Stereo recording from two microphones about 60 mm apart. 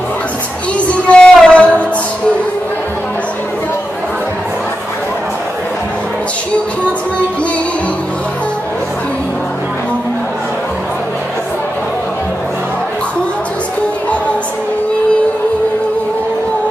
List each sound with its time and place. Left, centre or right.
0.7 s music: centre